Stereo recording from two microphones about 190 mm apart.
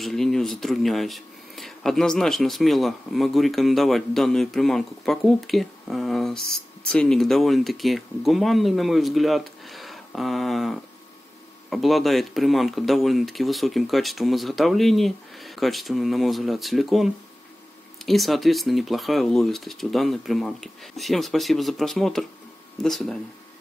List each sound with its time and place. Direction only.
0.0 s speech: centre (ahead or behind)